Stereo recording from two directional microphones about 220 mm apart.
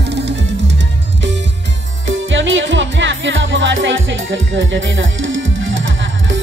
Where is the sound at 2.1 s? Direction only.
60° right (ahead or behind).